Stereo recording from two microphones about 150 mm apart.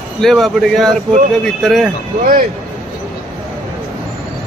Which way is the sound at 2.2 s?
70° right (ahead or behind).